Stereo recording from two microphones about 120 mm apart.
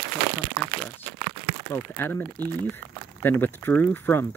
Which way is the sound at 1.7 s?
20° left (ahead or behind).